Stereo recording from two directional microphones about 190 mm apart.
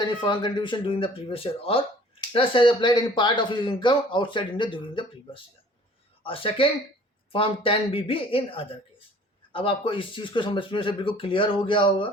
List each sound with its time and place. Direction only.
0.0 s speech: 25° left (ahead or behind)